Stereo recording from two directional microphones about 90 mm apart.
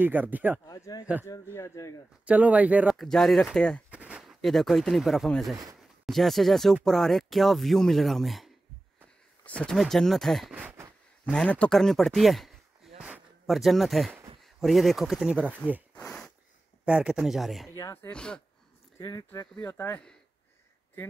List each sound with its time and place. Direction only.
0.0 s speech: 20° right (ahead or behind)
0.7 s speech: 40° left (ahead or behind)
2.2 s a man's voice: 15° right (ahead or behind)
2.9 s speech: centre (ahead or behind)
3.9 s speech: 15° right (ahead or behind)
9.4 s speech: 15° left (ahead or behind)
9.8 s speech: 5° left (ahead or behind)
10.5 s speech: 20° right (ahead or behind)
11.3 s speech: 15° left (ahead or behind); by 15.3 s centre (ahead or behind)
15.9 s a sound: 15° left (ahead or behind)
16.8 s a man's voice: 10° right (ahead or behind)
18.1 s speech: 10° left (ahead or behind)
19.0 s speech: 40° left (ahead or behind)
19.5 s speech: 15° left (ahead or behind)